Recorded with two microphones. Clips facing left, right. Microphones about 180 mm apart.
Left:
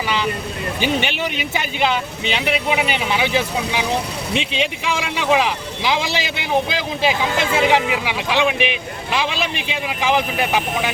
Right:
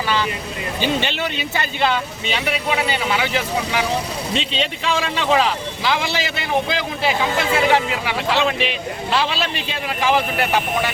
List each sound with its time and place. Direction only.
0.8 s speech: 15° left (ahead or behind)